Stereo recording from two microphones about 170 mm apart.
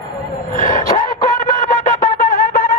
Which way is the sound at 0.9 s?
45° left (ahead or behind).